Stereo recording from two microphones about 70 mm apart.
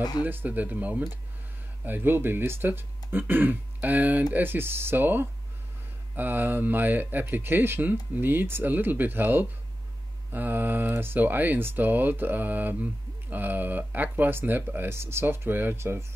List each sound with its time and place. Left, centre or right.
0.2 s speech: right